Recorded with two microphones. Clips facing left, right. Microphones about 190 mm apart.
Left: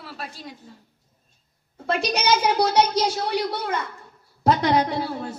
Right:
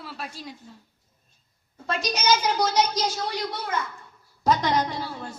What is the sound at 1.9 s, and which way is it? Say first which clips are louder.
A woman's voice: left 2 dB; 60° left (ahead or behind).